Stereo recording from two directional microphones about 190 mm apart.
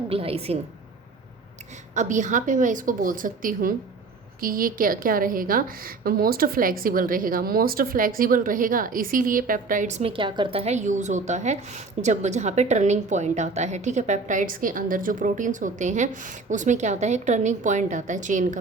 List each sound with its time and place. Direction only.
0.1 s a woman's voice: 30° right (ahead or behind)
2.0 s a woman's voice: 40° right (ahead or behind)